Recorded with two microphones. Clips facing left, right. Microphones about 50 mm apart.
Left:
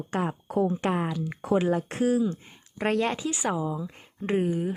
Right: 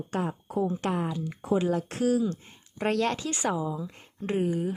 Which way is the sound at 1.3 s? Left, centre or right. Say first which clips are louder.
Left 2 dB; left.